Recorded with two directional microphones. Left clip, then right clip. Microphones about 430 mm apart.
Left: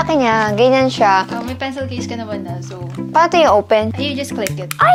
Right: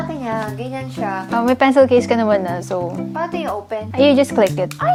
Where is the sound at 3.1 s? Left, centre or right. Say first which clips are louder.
Left 14 dB; left.